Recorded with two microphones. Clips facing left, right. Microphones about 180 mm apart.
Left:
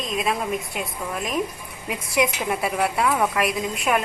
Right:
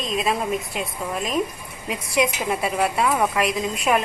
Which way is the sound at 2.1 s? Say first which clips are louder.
Right 1 dB; 25° right (ahead or behind).